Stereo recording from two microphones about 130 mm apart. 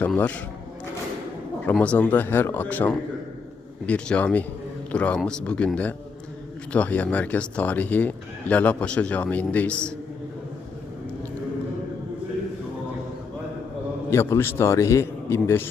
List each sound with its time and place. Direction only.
1.7 s speech: 10° left (ahead or behind)
14.1 s a man's voice: 20° left (ahead or behind)